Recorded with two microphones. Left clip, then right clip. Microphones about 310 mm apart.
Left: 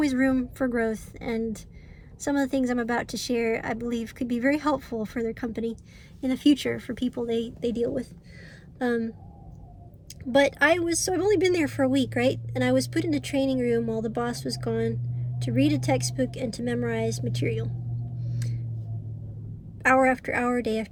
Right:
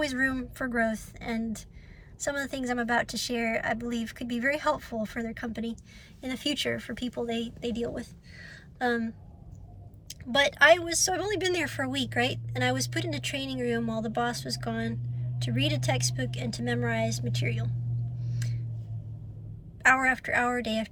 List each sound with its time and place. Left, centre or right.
0.1 s speech: centre
18.3 s a sound: centre
19.8 s speech: centre